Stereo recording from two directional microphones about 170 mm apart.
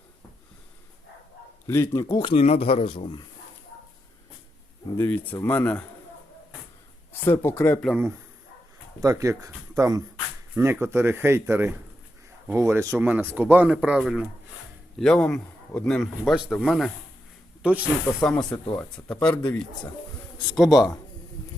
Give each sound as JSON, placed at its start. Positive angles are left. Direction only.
{"t": 1.6, "sound": "speech", "side_deg": 15}
{"t": 4.9, "sound": "speech", "side_deg": 10}
{"t": 7.1, "sound": "speech", "side_deg": 10}
{"t": 9.0, "sound": "a man's voice", "side_deg": -20}
{"t": 18.2, "sound": "speech", "side_deg": 5}
{"t": 20.6, "sound": "a man's voice", "side_deg": 0}